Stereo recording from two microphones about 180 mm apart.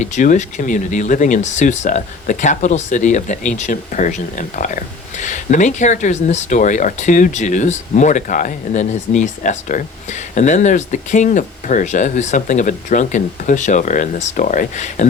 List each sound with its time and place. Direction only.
0.0 s speech: 45° left (ahead or behind)